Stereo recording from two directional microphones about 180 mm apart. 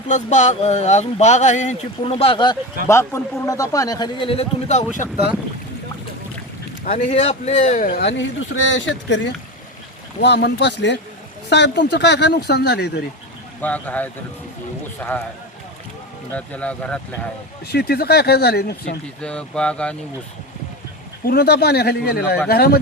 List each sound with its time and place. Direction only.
0.1 s speech: 40° left (ahead or behind)
2.8 s a man's voice: 15° left (ahead or behind); by 5.0 s 45° left (ahead or behind)
6.8 s speech: 40° left (ahead or behind)
8.0 s speech: 90° left
10.2 s speech: 70° left (ahead or behind)
13.6 s speech: 10° left (ahead or behind)
16.3 s speech: 10° left (ahead or behind)
17.7 s speech: 65° left (ahead or behind)
19.2 s speech: 5° left (ahead or behind)
21.2 s speech: 60° left (ahead or behind)